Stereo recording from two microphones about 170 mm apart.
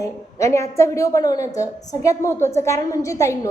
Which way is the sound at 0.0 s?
20° left (ahead or behind).